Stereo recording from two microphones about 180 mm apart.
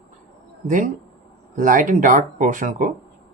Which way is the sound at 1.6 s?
50° right (ahead or behind).